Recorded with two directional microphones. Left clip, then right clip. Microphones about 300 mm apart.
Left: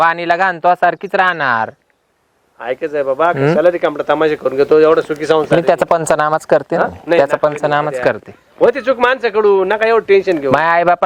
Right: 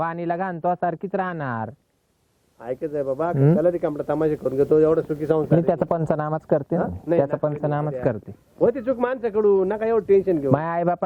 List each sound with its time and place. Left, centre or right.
0.0 s speech: centre
6.3 s speech: centre